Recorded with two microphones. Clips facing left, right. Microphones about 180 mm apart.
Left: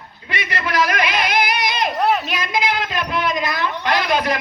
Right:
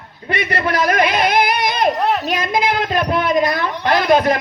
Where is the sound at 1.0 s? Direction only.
55° right (ahead or behind).